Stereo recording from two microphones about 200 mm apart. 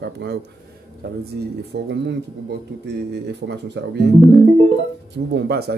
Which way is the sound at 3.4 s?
55° right (ahead or behind).